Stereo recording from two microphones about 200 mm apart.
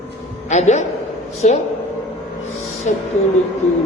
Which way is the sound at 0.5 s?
35° left (ahead or behind).